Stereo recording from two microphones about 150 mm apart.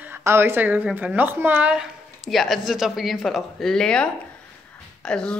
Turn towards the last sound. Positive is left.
turn(degrees=5)  # may be behind; listen again after turning